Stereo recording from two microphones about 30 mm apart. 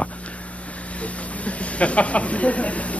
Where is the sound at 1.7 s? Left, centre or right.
Left.